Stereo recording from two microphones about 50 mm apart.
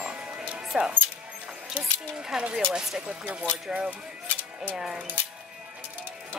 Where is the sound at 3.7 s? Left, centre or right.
Centre.